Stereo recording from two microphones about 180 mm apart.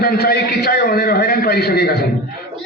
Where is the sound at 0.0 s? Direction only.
60° left (ahead or behind).